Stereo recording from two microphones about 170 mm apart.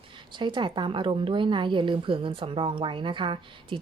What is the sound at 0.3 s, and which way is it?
A woman's voice, 25° right (ahead or behind).